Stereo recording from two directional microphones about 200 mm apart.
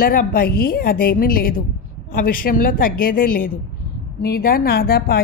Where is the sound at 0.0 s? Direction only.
45° left (ahead or behind).